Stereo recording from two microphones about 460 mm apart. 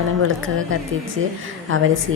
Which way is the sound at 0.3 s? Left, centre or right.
Right.